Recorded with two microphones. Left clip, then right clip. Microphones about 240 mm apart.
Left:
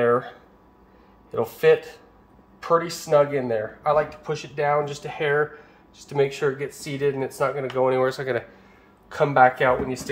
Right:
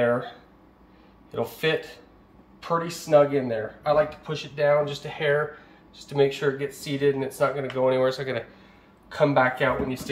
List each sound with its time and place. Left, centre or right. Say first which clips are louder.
1.3 s speech: left 7 dB; left